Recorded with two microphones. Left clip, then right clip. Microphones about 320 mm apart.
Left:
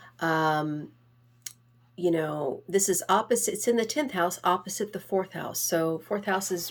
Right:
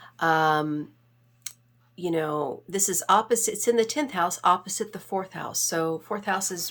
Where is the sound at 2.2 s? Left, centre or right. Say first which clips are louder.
Right 3 dB; right.